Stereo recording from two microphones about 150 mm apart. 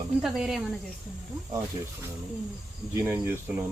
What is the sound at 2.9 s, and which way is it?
Cricket, 15° right (ahead or behind).